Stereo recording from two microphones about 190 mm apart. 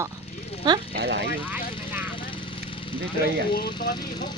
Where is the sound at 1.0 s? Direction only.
60° right (ahead or behind).